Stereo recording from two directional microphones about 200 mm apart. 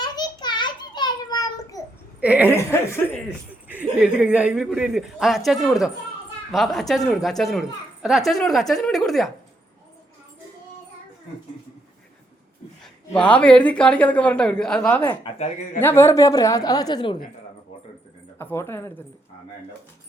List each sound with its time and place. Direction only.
0.0 s a sound: 20° left (ahead or behind)
2.2 s a woman's voice: 5° right (ahead or behind)
2.5 s a woman's voice: 15° left (ahead or behind)
3.7 s speech: 5° right (ahead or behind)
12.8 s a woman's voice: 5° left (ahead or behind)
15.1 s speech: 25° left (ahead or behind)
15.8 s a woman's voice: 10° left (ahead or behind)
18.3 s a woman's voice: 10° left (ahead or behind)